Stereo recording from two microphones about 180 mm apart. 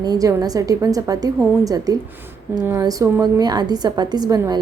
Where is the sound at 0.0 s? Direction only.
20° right (ahead or behind).